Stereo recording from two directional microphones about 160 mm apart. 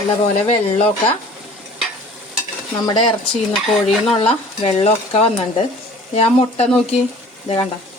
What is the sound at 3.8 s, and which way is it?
Stir, 35° left (ahead or behind).